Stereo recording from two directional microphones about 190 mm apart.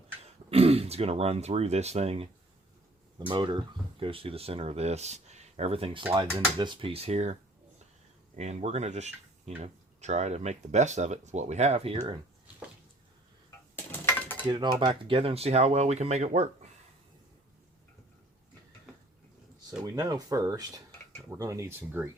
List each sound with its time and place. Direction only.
0.5 s speech: 30° right (ahead or behind)
8.4 s speech: 35° right (ahead or behind)
13.7 s dishes: 15° left (ahead or behind)
14.5 s speech: 25° right (ahead or behind)
20.0 s speech: 20° right (ahead or behind)